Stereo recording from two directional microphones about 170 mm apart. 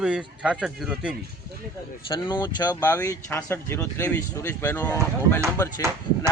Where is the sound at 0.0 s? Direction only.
5° right (ahead or behind).